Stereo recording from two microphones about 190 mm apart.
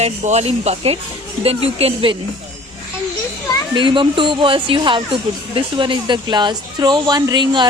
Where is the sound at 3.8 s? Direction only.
25° right (ahead or behind).